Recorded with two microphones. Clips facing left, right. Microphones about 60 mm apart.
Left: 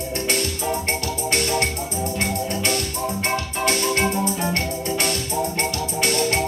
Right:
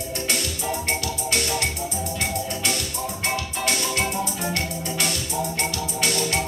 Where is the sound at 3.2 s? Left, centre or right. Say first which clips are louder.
Left 2 dB; left.